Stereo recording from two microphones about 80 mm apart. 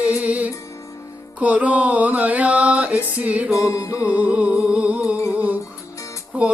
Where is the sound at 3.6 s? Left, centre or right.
Left.